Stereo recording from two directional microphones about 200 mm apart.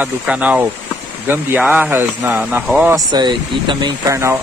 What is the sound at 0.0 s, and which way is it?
Speech, 5° right (ahead or behind).